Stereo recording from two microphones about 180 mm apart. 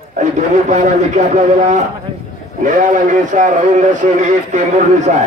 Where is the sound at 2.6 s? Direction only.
45° right (ahead or behind).